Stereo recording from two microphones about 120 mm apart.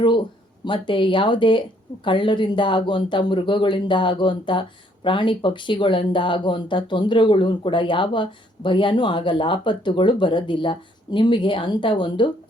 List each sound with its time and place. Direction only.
0.0 s speech: 40° left (ahead or behind)